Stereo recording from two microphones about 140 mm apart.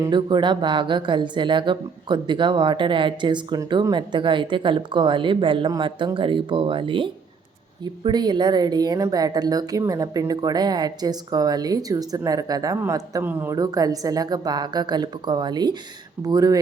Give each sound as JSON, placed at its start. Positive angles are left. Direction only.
{"t": 0.1, "sound": "speech", "side_deg": -35}
{"t": 13.6, "sound": "speech", "side_deg": -25}